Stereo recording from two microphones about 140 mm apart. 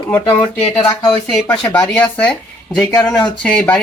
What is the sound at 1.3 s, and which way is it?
Speech, 5° left (ahead or behind).